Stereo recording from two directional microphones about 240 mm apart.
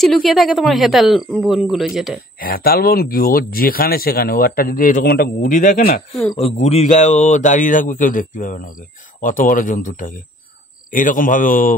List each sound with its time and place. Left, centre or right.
0.0 s speech: centre
2.4 s speech: left
6.4 s speech: left